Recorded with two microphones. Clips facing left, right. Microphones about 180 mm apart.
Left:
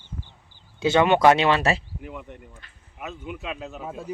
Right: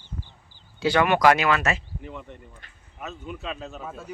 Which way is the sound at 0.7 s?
20° left (ahead or behind).